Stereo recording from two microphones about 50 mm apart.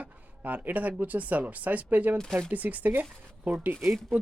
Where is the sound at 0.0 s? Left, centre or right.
Right.